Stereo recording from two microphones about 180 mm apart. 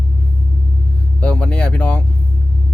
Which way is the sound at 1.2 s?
5° left (ahead or behind).